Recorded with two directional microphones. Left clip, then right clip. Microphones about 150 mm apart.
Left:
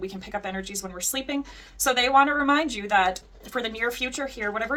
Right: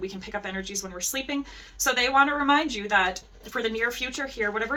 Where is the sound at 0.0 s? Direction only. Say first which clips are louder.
Left 1 dB; 45° left (ahead or behind).